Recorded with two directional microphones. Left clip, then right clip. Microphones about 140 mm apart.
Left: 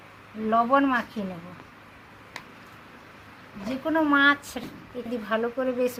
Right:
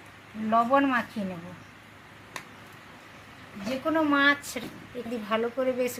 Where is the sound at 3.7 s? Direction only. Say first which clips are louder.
Left 1 dB; 5° right (ahead or behind).